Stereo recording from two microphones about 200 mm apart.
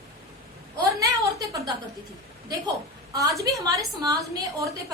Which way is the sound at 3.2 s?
15° right (ahead or behind).